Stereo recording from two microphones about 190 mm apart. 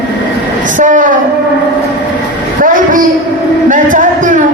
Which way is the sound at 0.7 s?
40° right (ahead or behind).